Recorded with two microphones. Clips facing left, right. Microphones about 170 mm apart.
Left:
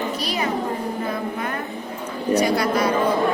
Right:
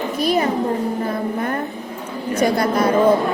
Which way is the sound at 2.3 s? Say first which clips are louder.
Right 3 dB; 50° right (ahead or behind).